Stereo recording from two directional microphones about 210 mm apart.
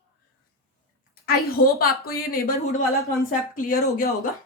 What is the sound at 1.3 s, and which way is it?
Speech, 45° left (ahead or behind).